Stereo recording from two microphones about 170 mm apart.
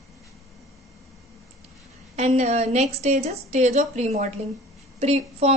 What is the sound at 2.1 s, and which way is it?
A woman's voice, 40° right (ahead or behind).